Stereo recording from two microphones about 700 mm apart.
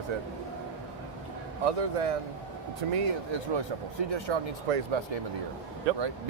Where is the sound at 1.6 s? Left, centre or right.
Right.